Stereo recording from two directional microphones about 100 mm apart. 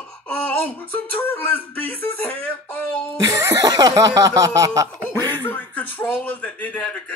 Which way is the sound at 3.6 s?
40° right (ahead or behind).